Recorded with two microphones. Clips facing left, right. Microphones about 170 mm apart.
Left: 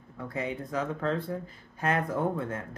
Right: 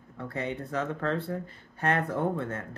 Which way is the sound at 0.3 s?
10° left (ahead or behind).